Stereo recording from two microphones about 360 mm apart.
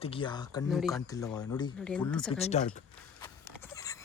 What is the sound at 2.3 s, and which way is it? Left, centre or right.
Speech, centre.